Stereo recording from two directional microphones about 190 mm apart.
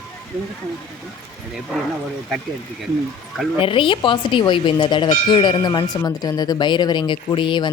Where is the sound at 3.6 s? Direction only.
25° left (ahead or behind).